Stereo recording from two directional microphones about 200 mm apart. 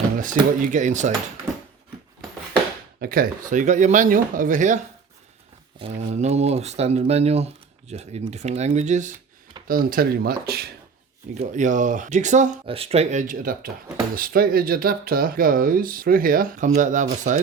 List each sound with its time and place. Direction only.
0.2 s speech: 40° right (ahead or behind)
3.0 s speech: 50° right (ahead or behind)
5.8 s speech: 35° right (ahead or behind); by 10.7 s 50° right (ahead or behind)
11.3 s speech: 40° right (ahead or behind)